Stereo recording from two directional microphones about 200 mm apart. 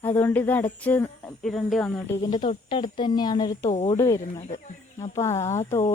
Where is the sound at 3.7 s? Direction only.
30° left (ahead or behind).